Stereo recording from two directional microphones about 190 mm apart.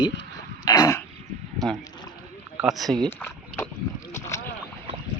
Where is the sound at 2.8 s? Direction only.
Centre (ahead or behind).